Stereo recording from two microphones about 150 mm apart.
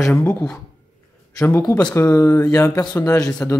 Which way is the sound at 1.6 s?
25° left (ahead or behind).